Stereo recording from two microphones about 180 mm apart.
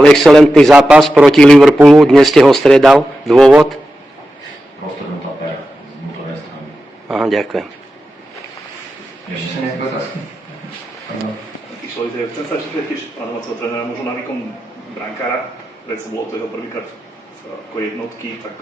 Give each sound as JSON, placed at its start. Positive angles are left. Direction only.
{"t": 0.0, "sound": "a man's voice", "side_deg": 0}
{"t": 7.1, "sound": "a man's voice", "side_deg": 0}